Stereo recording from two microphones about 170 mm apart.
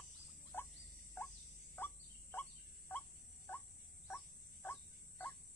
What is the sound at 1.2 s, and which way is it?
Rodents, 10° left (ahead or behind).